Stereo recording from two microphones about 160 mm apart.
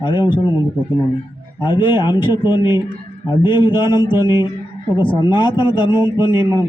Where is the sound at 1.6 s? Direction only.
30° left (ahead or behind).